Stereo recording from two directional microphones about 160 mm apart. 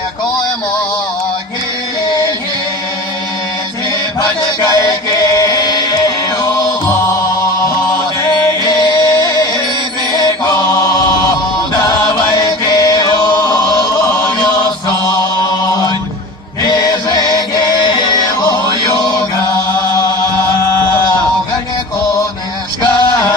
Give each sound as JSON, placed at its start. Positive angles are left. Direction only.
{"t": 4.2, "sound": "chant", "side_deg": 25}
{"t": 5.4, "sound": "music", "side_deg": 25}
{"t": 8.8, "sound": "music", "side_deg": 25}
{"t": 10.1, "sound": "mantra", "side_deg": 25}
{"t": 12.0, "sound": "chant", "side_deg": 25}
{"t": 14.3, "sound": "music", "side_deg": 25}
{"t": 22.8, "sound": "music", "side_deg": 30}